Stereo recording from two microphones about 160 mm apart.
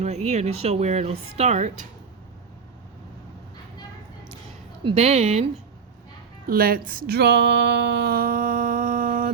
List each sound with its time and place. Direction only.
0.0 s speech: 45° right (ahead or behind)
4.8 s a woman's voice: 35° right (ahead or behind)
6.5 s speech: 65° right (ahead or behind)